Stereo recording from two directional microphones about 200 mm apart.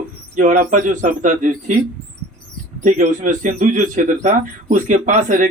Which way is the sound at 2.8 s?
40° right (ahead or behind).